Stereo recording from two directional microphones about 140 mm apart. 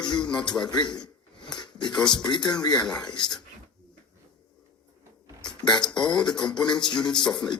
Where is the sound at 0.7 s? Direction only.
30° left (ahead or behind).